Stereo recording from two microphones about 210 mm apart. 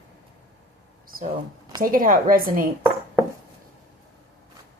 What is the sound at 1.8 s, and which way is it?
Speech, 40° right (ahead or behind).